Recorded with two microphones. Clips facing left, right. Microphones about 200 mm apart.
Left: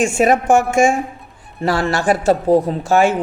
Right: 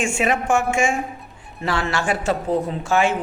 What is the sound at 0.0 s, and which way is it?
Speech, 40° left (ahead or behind).